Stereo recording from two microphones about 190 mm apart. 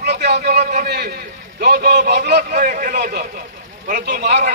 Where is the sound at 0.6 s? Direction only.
50° right (ahead or behind).